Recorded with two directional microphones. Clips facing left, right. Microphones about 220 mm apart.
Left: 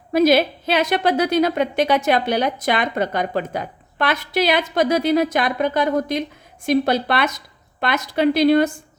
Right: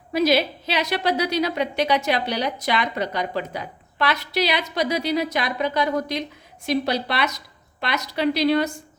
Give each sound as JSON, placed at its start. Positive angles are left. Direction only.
{"t": 0.1, "sound": "a woman's voice", "side_deg": 50}